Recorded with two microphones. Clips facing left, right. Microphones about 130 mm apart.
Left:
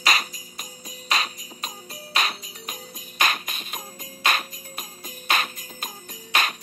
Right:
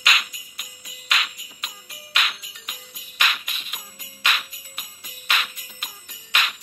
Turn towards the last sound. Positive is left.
turn(degrees=40)  # may be behind; listen again after turning